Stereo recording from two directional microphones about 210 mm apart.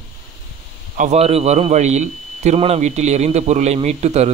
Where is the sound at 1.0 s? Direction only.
30° right (ahead or behind).